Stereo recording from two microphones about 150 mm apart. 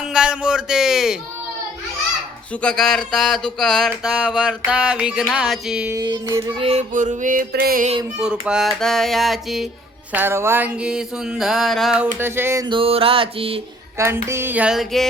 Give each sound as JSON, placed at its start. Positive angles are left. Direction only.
{"t": 0.0, "sound": "a sound", "side_deg": -5}
{"t": 2.5, "sound": "mantra", "side_deg": 5}
{"t": 5.9, "sound": "child singing", "side_deg": -30}
{"t": 6.6, "sound": "mantra", "side_deg": -40}
{"t": 6.9, "sound": "mantra", "side_deg": -55}
{"t": 8.2, "sound": "mantra", "side_deg": -5}
{"t": 10.1, "sound": "mantra", "side_deg": -15}
{"t": 12.2, "sound": "a sound", "side_deg": -15}
{"t": 12.6, "sound": "mantra", "side_deg": -35}
{"t": 14.0, "sound": "a sound", "side_deg": -15}